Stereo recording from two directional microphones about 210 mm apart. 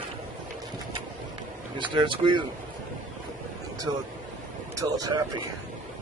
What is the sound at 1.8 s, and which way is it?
Speech, 25° right (ahead or behind).